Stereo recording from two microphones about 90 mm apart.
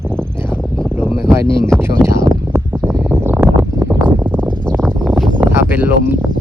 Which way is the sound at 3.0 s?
20° right (ahead or behind).